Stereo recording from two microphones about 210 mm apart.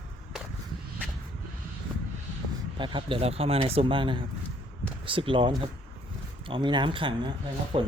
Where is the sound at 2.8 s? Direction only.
25° right (ahead or behind).